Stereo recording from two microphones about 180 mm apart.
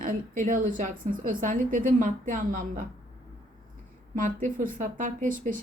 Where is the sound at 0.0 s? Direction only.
45° right (ahead or behind).